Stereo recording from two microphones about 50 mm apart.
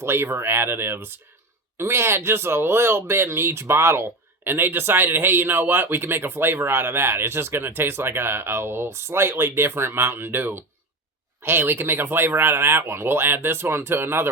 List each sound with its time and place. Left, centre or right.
0.0 s speech: right
1.8 s speech: right
4.4 s speech: right